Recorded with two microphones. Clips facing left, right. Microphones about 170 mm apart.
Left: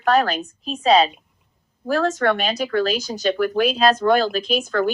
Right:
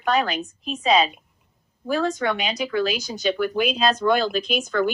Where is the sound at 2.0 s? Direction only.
55° left (ahead or behind).